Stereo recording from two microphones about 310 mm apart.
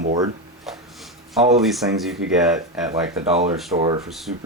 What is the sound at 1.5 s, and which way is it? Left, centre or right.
Speech, centre.